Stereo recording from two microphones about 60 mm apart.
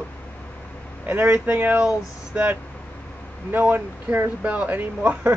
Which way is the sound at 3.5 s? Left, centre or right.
Right.